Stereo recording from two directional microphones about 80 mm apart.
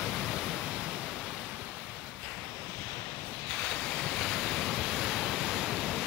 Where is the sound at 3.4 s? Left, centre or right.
Centre.